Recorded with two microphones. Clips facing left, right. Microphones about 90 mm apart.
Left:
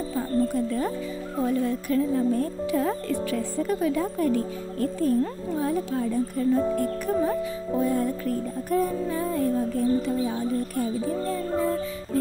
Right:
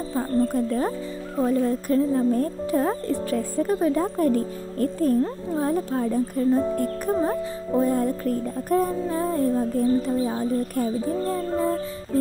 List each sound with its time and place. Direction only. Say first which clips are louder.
0.6 s music: right 2 dB; 45° right (ahead or behind)
1.4 s speech: right 3 dB; 40° right (ahead or behind)
5.6 s speech: right 2 dB; 40° right (ahead or behind)
7.8 s music: right 2 dB; 45° right (ahead or behind)
8.6 s speech: right 2 dB; 40° right (ahead or behind)